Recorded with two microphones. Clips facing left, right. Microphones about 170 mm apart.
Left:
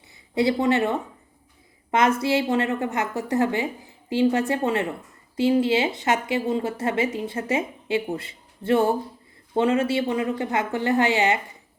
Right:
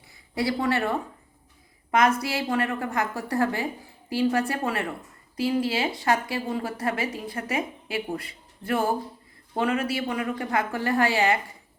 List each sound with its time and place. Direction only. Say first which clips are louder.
0.3 s speech: left 5 dB; 20° left (ahead or behind)